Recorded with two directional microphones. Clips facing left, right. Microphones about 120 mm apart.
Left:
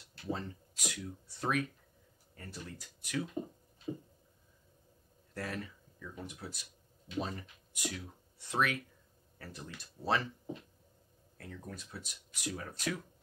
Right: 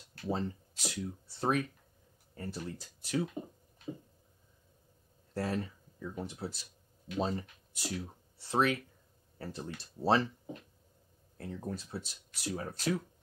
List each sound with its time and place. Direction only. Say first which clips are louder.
0.3 s speech: right 4 dB; 30° right (ahead or behind)
3.9 s a sound: left 2 dB; 5° right (ahead or behind)
5.3 s speech: right 6 dB; 30° right (ahead or behind)
11.3 s speech: right 7 dB; 30° right (ahead or behind)